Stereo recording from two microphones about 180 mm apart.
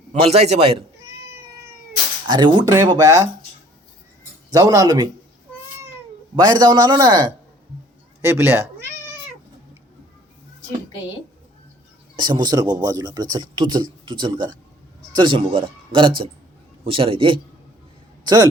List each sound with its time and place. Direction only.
0.1 s a man's voice: 35° right (ahead or behind)
2.2 s speech: 25° right (ahead or behind)
4.5 s speech: 20° right (ahead or behind)
6.3 s speech: 25° right (ahead or behind)
12.1 s speech: 25° right (ahead or behind)